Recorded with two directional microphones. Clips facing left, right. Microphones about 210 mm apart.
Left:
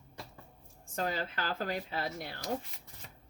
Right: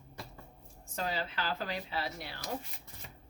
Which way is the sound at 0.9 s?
50° left (ahead or behind).